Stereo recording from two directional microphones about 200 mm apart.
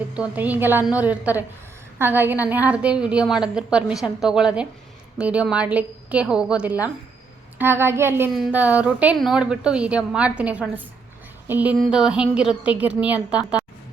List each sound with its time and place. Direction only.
0.1 s a woman's voice: 5° right (ahead or behind)